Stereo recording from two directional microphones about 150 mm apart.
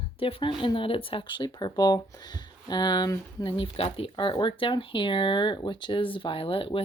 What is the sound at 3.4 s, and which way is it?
Speech, 35° left (ahead or behind).